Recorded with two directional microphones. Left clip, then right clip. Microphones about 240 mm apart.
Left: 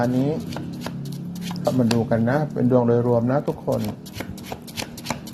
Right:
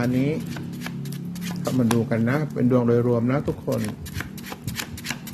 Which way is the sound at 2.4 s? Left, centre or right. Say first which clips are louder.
Left 3 dB; centre.